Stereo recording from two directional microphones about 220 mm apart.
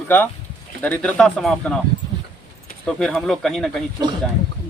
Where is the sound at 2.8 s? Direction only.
Centre (ahead or behind).